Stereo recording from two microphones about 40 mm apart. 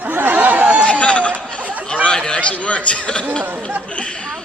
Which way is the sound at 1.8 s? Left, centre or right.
Left.